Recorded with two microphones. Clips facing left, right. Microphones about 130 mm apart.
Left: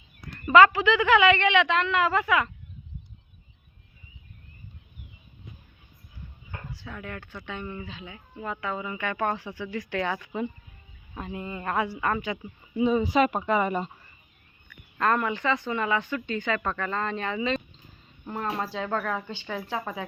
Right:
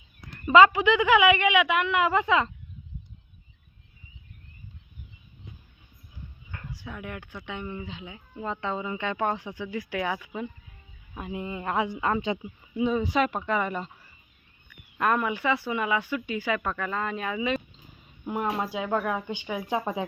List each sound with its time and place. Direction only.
0.3 s speech: 15° right (ahead or behind)
6.7 s speech: 15° right (ahead or behind)
12.7 s speech: centre (ahead or behind)
14.7 s speech: 15° right (ahead or behind)